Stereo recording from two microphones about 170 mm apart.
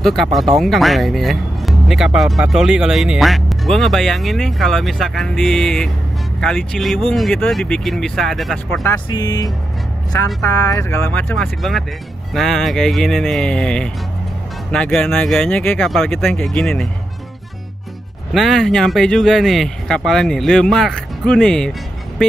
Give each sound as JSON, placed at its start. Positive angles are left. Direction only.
{"t": 0.0, "sound": "speech", "side_deg": 0}
{"t": 9.1, "sound": "speech", "side_deg": 20}
{"t": 12.4, "sound": "speech", "side_deg": 0}
{"t": 18.3, "sound": "speech", "side_deg": 0}